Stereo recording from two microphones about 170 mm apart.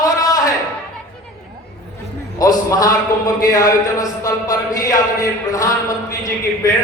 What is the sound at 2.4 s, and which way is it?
A man's voice, 20° left (ahead or behind).